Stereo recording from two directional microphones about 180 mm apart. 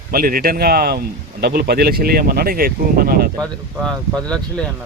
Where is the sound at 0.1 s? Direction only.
55° right (ahead or behind).